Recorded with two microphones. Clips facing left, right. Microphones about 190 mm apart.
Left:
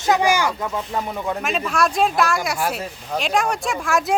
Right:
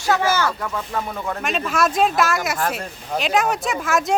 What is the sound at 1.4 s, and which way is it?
Speech, centre (ahead or behind).